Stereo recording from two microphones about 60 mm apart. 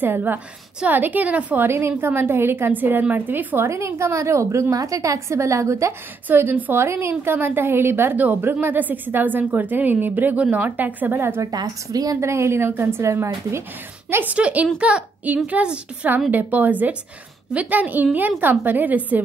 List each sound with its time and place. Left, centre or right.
0.0 s a woman's voice: right
1.7 s a woman's voice: right
3.6 s a woman's voice: right
6.2 s a woman's voice: right
11.1 s a woman's voice: right
11.5 s a woman's voice: right
12.2 s a woman's voice: right
14.2 s a woman's voice: right
16.3 s a woman's voice: right